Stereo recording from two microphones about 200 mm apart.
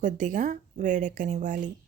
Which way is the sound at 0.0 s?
40° right (ahead or behind).